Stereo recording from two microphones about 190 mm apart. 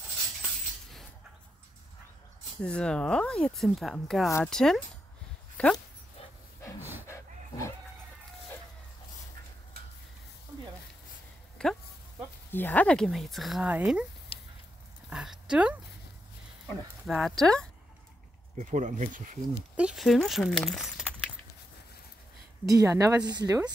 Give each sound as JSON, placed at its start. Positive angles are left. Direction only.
{"t": 2.6, "sound": "speech", "side_deg": 5}
{"t": 6.8, "sound": "a sound", "side_deg": -10}
{"t": 7.1, "sound": "roaring cats", "side_deg": 15}
{"t": 11.6, "sound": "speech", "side_deg": 5}
{"t": 14.3, "sound": "squish", "side_deg": 30}
{"t": 15.0, "sound": "speech", "side_deg": -5}
{"t": 18.6, "sound": "speech", "side_deg": -40}
{"t": 19.8, "sound": "speech", "side_deg": -5}
{"t": 22.7, "sound": "speech", "side_deg": -15}